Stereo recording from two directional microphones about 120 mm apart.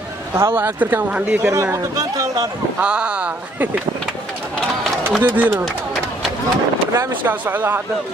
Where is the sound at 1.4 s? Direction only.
25° right (ahead or behind).